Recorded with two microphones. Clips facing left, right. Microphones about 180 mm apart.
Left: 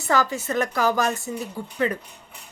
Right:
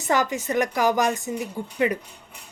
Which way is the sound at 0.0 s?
20° right (ahead or behind).